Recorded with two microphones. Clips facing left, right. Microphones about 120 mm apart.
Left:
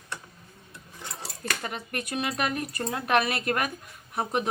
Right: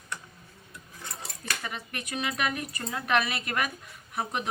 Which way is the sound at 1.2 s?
40° left (ahead or behind).